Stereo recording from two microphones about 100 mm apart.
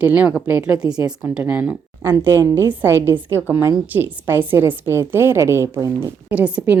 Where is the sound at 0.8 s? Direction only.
45° left (ahead or behind).